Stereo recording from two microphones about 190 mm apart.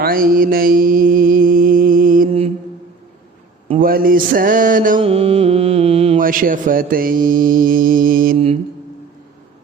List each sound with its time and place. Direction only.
0.0 s mantra: 50° right (ahead or behind)
3.8 s mantra: 50° right (ahead or behind)
4.9 s mantra: 30° right (ahead or behind)
6.1 s mantra: 45° right (ahead or behind)